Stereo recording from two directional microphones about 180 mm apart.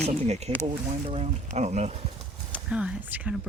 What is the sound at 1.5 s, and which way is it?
Speech, 40° right (ahead or behind).